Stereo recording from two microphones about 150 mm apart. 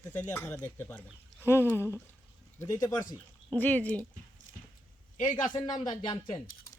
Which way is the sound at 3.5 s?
10° left (ahead or behind).